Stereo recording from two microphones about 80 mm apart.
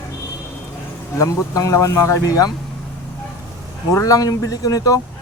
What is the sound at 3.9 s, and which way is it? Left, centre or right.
Speech, left.